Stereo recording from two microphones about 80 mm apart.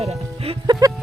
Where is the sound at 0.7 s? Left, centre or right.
Right.